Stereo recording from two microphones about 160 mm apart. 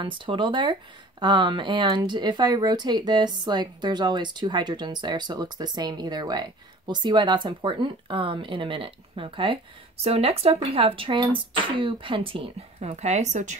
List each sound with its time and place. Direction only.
0.0 s speech: 30° right (ahead or behind); by 13.6 s 50° right (ahead or behind)